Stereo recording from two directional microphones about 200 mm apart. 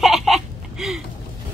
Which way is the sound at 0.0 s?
Centre (ahead or behind).